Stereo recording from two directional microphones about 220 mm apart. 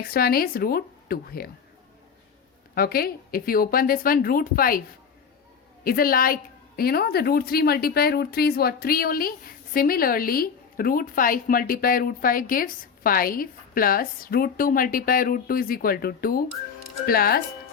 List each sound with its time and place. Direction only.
0.1 s a woman's voice: 45° left (ahead or behind)
2.7 s a woman's voice: 40° left (ahead or behind)
5.8 s a woman's voice: 40° left (ahead or behind)